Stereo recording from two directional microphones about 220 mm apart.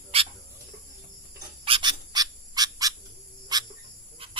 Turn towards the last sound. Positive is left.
turn(degrees=-25)  # may be behind; listen again after turning